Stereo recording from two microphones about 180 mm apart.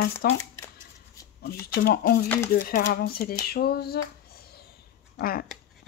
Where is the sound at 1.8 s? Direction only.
55° left (ahead or behind).